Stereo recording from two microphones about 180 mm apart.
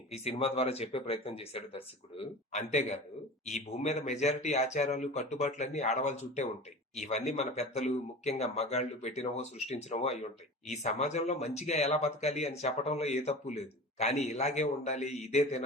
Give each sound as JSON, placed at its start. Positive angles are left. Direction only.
{"t": 0.1, "sound": "speech", "side_deg": 35}